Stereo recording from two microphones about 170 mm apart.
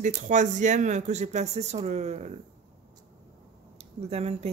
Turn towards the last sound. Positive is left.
turn(degrees=-35)  # may be behind; listen again after turning